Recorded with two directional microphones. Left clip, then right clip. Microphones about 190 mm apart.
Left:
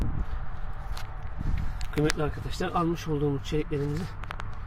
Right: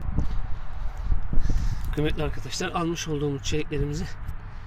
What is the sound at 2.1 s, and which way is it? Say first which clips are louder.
Speech: right 1 dB; 10° right (ahead or behind).